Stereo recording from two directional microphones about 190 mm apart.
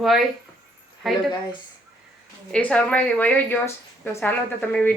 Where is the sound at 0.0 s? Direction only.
Centre (ahead or behind).